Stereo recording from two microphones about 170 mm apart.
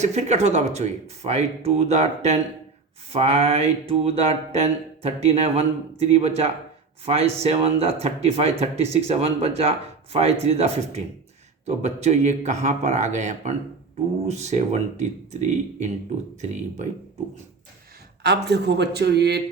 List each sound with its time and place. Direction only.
0.0 s a man's voice: 40° right (ahead or behind)
18.2 s speech: 80° right